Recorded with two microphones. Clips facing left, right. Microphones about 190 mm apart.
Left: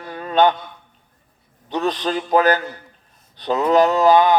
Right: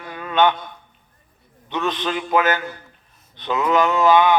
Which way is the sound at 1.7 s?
35° left (ahead or behind).